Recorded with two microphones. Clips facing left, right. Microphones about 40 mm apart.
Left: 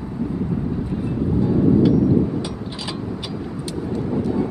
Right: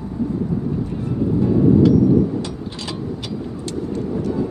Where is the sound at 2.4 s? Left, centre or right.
Centre.